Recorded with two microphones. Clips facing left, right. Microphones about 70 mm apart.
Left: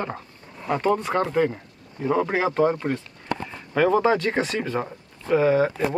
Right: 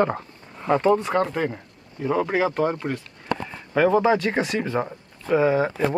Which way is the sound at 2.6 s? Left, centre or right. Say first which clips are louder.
Left 2 dB; centre.